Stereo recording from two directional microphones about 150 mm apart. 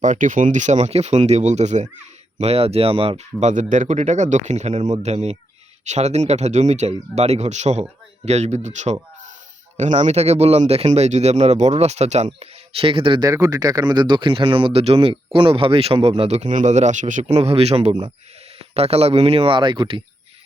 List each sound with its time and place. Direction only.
0.0 s speech: 60° right (ahead or behind); by 3.5 s 40° right (ahead or behind)
3.5 s speech: 55° right (ahead or behind); by 20.0 s 30° right (ahead or behind)